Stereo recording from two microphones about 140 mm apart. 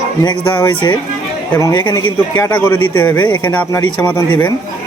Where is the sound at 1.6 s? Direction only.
30° left (ahead or behind).